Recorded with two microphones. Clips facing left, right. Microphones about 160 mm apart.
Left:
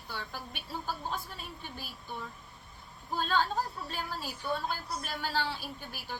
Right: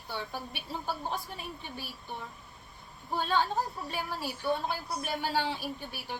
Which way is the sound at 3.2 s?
15° right (ahead or behind).